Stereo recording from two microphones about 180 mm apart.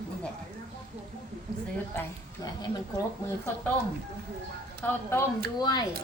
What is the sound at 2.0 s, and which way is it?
A woman's voice, 20° left (ahead or behind).